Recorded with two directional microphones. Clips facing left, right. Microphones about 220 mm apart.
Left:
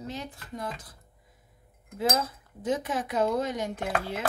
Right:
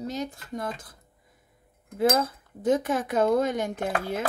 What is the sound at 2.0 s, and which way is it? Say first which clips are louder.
A woman's voice: right 5 dB; 50° right (ahead or behind).